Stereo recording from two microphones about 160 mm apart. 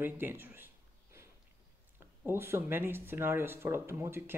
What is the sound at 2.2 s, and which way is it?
Speech, 15° right (ahead or behind).